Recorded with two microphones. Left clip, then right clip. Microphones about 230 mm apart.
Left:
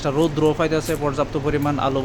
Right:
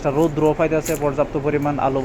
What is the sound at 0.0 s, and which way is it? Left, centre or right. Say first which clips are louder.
Speech: right 1 dB; centre.